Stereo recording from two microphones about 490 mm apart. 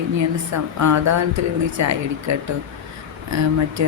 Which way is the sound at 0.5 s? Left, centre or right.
Right.